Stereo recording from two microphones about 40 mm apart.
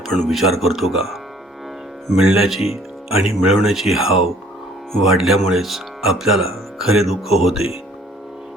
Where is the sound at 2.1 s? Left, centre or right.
Centre.